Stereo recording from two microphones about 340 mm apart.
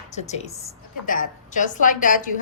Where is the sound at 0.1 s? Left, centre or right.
Centre.